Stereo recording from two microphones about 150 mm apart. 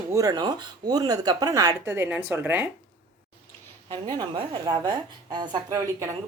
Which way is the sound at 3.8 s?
30° right (ahead or behind).